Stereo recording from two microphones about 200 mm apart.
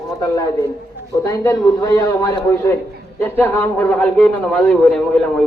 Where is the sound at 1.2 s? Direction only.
15° left (ahead or behind).